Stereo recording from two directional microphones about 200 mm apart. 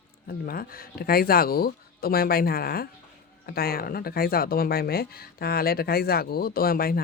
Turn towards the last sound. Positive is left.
turn(degrees=50)  # may be behind; listen again after turning